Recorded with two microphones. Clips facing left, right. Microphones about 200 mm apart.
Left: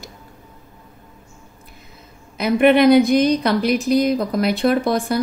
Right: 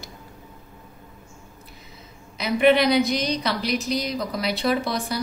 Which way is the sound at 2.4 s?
50° left (ahead or behind).